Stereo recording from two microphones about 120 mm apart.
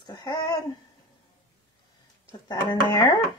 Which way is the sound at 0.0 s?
40° left (ahead or behind).